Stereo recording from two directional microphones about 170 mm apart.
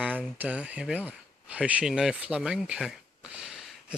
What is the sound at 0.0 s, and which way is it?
Speech, 10° right (ahead or behind).